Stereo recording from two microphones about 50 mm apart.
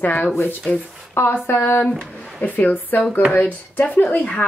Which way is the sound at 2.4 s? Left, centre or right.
Left.